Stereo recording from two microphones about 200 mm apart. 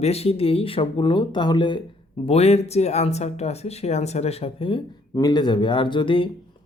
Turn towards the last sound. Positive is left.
turn(degrees=25)  # may be behind; listen again after turning